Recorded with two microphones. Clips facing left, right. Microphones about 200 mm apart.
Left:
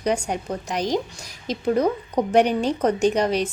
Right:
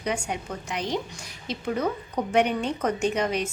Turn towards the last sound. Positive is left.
turn(degrees=35)  # may be behind; listen again after turning